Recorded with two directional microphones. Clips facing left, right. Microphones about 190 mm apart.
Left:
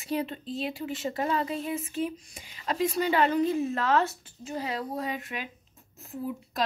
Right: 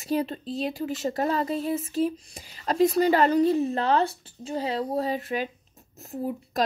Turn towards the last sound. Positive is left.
turn(degrees=-40)  # may be behind; listen again after turning